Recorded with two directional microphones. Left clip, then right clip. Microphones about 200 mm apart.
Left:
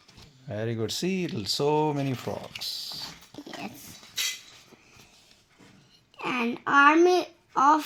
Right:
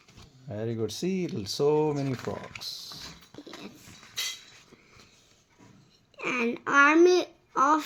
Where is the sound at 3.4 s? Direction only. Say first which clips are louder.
Left 6 dB; 50° left (ahead or behind).